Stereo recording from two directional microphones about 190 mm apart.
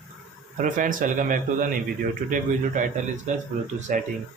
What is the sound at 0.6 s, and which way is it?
A man's voice, 45° right (ahead or behind).